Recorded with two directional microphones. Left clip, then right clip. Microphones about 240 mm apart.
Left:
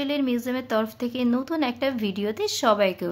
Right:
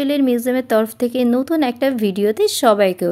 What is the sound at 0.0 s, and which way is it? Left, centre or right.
Speech, right.